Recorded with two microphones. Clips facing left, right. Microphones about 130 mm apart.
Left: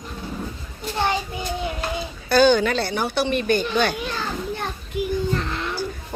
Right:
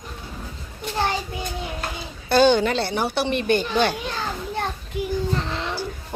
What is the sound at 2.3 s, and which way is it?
A woman's voice, 30° right (ahead or behind).